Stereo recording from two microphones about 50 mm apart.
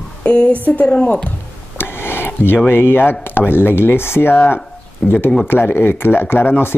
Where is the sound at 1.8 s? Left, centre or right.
Left.